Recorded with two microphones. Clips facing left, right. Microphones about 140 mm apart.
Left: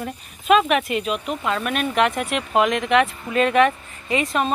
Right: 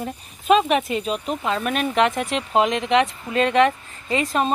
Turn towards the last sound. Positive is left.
turn(degrees=-30)  # may be behind; listen again after turning